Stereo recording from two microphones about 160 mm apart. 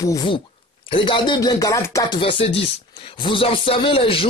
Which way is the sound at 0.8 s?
30° left (ahead or behind).